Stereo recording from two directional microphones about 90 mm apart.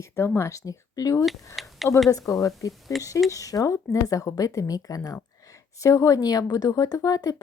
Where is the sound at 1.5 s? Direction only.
Centre (ahead or behind).